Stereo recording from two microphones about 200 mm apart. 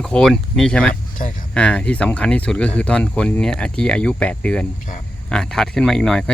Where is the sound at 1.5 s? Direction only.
5° left (ahead or behind).